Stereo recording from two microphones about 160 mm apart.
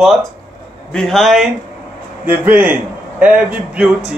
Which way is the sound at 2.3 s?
10° right (ahead or behind).